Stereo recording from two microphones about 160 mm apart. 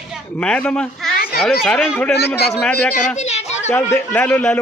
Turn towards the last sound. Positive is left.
turn(degrees=10)  # may be behind; listen again after turning